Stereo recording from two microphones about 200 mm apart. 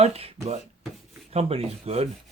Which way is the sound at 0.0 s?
30° right (ahead or behind).